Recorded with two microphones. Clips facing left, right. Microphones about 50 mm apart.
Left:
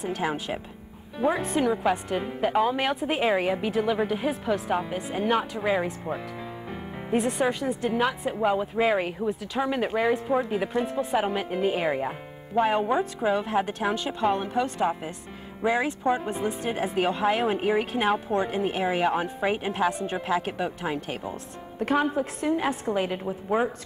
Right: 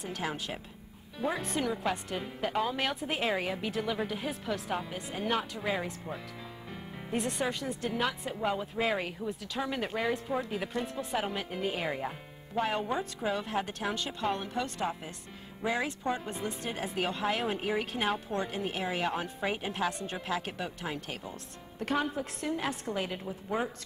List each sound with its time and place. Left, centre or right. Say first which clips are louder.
0.0 s speech: left 7 dB; centre